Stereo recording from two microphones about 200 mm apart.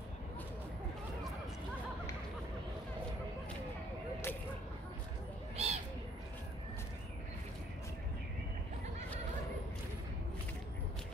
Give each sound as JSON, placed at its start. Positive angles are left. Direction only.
{"t": 5.6, "sound": "bird", "side_deg": -30}